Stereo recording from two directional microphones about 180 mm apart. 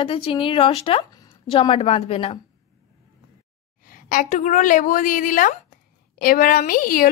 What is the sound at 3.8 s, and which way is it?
A woman's voice, 50° left (ahead or behind).